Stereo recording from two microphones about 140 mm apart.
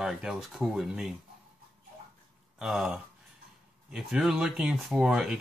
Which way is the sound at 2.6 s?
Centre (ahead or behind).